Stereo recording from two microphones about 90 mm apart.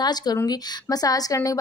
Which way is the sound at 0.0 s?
50° left (ahead or behind).